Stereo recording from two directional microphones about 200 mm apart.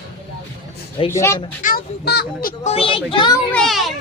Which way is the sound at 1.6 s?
50° left (ahead or behind).